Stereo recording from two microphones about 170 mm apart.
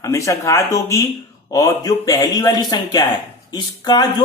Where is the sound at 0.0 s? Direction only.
20° left (ahead or behind).